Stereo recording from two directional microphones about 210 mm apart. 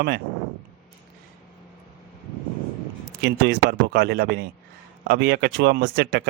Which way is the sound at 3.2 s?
50° right (ahead or behind).